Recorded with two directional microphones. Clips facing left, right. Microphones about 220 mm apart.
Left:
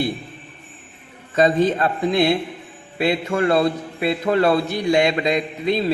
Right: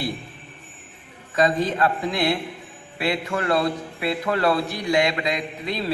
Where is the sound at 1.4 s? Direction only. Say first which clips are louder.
Left 4 dB; 25° left (ahead or behind).